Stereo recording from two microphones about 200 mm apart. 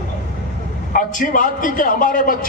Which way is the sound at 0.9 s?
40° left (ahead or behind).